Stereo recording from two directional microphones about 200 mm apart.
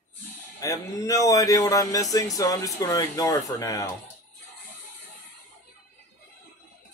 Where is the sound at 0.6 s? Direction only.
15° left (ahead or behind).